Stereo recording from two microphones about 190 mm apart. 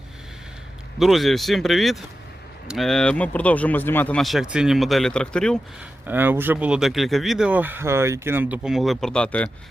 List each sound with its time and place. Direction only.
0.9 s speech: centre (ahead or behind)
6.1 s speech: 10° right (ahead or behind); by 9.5 s 5° left (ahead or behind)